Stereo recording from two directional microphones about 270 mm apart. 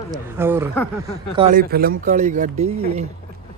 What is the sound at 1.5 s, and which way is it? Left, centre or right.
Speech, right.